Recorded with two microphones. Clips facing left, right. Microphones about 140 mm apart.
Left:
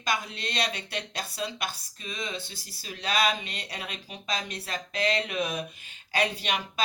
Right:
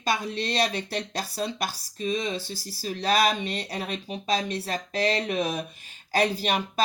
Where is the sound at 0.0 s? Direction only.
35° right (ahead or behind).